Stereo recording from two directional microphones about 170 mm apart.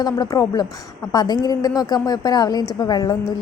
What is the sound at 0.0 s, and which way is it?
A woman's voice, 20° left (ahead or behind).